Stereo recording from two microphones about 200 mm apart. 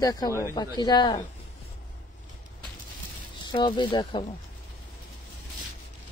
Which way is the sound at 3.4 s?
25° left (ahead or behind).